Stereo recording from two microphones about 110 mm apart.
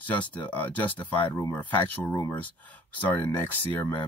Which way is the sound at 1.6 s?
15° left (ahead or behind).